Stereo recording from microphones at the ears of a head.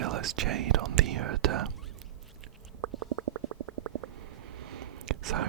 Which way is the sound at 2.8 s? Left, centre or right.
Right.